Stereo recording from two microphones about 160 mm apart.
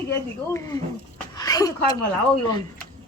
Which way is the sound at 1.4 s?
25° left (ahead or behind).